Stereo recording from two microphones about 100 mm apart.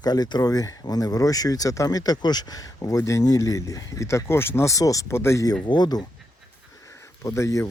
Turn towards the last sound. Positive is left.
turn(degrees=30)  # may be behind; listen again after turning